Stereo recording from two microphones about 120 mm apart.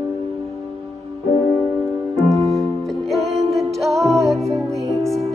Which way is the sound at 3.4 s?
25° right (ahead or behind).